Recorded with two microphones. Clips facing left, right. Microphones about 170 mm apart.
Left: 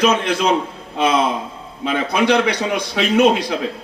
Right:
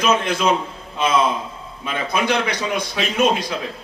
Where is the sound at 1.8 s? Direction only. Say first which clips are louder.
Left 5 dB; 70° left (ahead or behind).